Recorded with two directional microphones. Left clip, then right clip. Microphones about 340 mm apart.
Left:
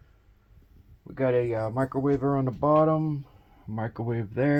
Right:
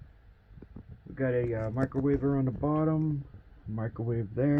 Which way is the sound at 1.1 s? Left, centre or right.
Left.